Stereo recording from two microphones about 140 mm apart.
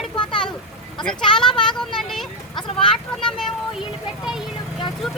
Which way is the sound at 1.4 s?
5° left (ahead or behind).